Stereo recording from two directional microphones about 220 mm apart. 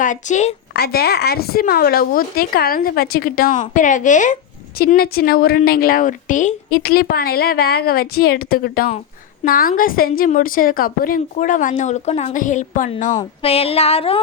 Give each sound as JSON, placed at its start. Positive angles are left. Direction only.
{"t": 0.0, "sound": "a woman's voice", "side_deg": 35}
{"t": 0.8, "sound": "a woman's voice", "side_deg": 45}